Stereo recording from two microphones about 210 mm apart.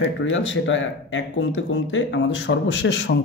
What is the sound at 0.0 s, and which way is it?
Speech, 65° left (ahead or behind).